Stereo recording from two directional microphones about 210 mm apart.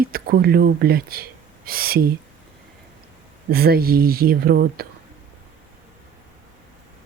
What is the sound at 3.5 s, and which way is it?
Speech, 45° right (ahead or behind).